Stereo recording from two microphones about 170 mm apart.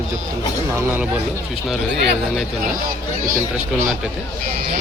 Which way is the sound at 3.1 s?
50° right (ahead or behind).